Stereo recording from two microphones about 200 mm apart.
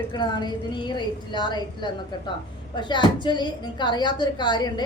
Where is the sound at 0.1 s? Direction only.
20° left (ahead or behind).